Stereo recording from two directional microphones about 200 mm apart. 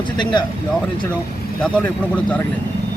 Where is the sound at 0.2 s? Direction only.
20° left (ahead or behind).